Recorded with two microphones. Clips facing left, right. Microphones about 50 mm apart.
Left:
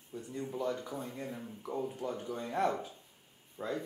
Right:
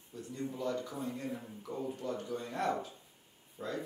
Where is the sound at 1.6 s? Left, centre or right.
Centre.